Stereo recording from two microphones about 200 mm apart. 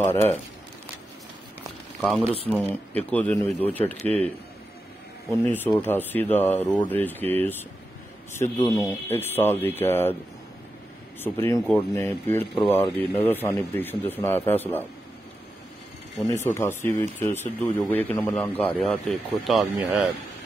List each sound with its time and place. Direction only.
0.0 s a man's voice: 10° left (ahead or behind)
2.0 s a man's voice: centre (ahead or behind)
5.3 s a man's voice: 10° left (ahead or behind)
8.6 s speech: centre (ahead or behind)
9.1 s a man's voice: 10° left (ahead or behind)
11.1 s a man's voice: 10° left (ahead or behind)
16.3 s a man's voice: 15° left (ahead or behind)